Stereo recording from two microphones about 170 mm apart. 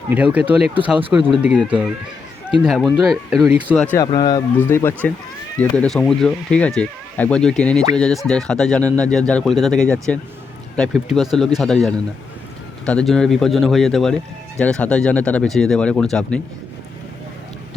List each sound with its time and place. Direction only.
0.1 s speech: 10° right (ahead or behind)
3.9 s speech: 25° left (ahead or behind); by 16.4 s 5° left (ahead or behind)